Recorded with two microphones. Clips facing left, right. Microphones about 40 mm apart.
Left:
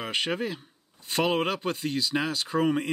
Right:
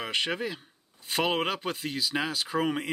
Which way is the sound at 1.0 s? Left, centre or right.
Centre.